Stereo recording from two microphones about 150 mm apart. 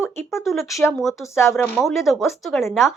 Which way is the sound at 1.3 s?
15° left (ahead or behind).